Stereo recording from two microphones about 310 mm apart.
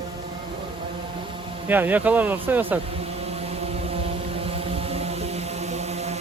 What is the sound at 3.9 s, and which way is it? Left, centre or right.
Vehicle, centre.